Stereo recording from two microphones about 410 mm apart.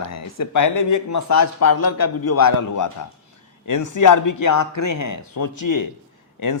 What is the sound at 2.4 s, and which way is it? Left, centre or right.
Speech, left.